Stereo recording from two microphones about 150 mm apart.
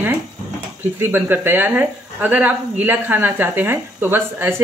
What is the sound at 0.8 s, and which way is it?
A woman's voice, 15° right (ahead or behind).